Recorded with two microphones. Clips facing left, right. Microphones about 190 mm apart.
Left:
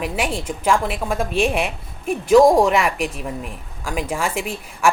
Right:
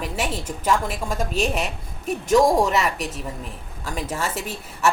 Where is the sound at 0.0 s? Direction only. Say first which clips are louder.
Left 3 dB; 10° left (ahead or behind).